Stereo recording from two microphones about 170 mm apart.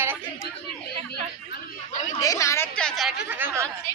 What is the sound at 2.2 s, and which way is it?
Speech, 20° left (ahead or behind).